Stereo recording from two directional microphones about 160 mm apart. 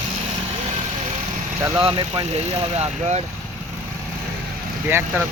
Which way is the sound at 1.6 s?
15° right (ahead or behind).